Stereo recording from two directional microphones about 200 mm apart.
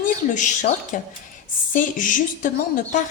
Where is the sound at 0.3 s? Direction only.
40° left (ahead or behind).